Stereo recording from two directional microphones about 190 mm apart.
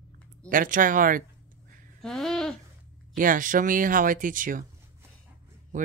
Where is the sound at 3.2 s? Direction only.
45° right (ahead or behind).